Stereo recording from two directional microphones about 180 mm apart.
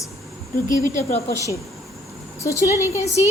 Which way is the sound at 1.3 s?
15° left (ahead or behind).